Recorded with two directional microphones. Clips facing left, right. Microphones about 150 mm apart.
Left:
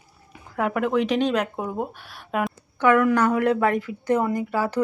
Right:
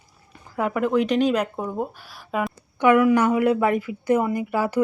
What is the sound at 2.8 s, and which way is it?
Speech, 15° right (ahead or behind).